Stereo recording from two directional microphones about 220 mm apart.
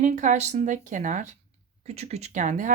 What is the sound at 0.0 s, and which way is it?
Speech, 35° right (ahead or behind).